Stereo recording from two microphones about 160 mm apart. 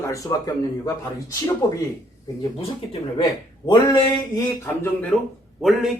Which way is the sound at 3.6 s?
20° left (ahead or behind).